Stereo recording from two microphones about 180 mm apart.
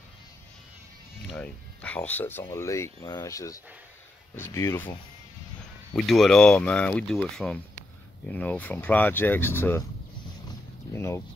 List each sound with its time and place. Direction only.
1.3 s speech: 5° left (ahead or behind)
5.9 s speech: centre (ahead or behind)
10.9 s speech: 15° left (ahead or behind)